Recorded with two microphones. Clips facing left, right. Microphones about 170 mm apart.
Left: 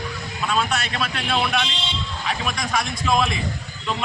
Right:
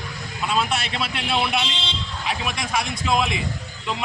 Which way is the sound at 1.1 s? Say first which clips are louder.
Even; 10° right (ahead or behind).